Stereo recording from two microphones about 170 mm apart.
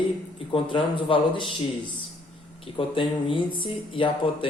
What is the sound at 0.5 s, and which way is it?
Speech, 30° left (ahead or behind).